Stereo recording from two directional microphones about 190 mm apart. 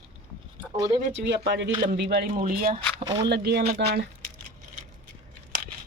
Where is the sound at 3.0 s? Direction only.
20° right (ahead or behind).